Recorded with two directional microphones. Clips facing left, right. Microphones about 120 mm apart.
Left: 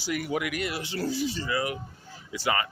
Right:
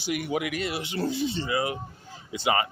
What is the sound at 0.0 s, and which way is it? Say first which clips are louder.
Speech: right 1 dB; 20° right (ahead or behind).